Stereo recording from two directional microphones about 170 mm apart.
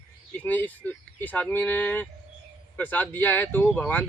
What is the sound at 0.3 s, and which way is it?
Speech, 10° left (ahead or behind).